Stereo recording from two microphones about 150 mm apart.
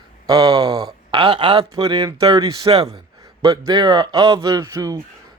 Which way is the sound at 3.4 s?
25° right (ahead or behind).